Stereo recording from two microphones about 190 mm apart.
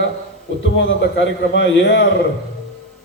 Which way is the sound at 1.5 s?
65° left (ahead or behind).